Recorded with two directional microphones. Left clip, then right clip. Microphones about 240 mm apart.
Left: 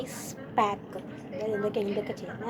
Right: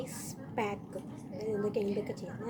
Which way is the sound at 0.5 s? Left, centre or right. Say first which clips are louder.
Left 9 dB; centre.